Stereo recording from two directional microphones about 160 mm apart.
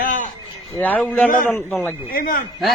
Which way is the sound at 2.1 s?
65° left (ahead or behind).